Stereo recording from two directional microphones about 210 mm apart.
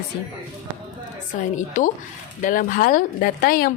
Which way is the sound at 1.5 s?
40° left (ahead or behind).